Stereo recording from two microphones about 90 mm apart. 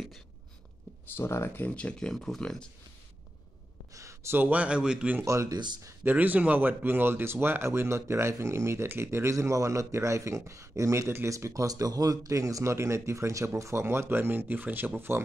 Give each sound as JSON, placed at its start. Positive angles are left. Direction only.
{"t": 1.1, "sound": "speech", "side_deg": 25}
{"t": 3.9, "sound": "speech", "side_deg": -35}
{"t": 5.2, "sound": "speech", "side_deg": -35}
{"t": 6.0, "sound": "speech", "side_deg": -20}